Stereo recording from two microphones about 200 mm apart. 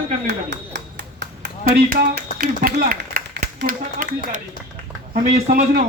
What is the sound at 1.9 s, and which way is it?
Speech, 45° right (ahead or behind).